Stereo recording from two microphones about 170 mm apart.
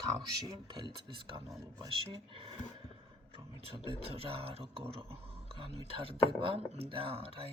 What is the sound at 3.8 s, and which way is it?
Speech, 35° right (ahead or behind).